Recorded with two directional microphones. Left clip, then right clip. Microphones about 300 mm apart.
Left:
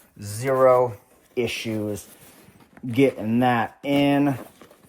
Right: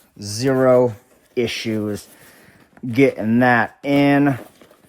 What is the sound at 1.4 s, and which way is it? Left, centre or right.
Speech, centre.